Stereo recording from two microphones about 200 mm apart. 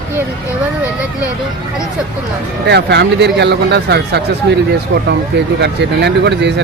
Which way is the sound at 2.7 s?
55° right (ahead or behind).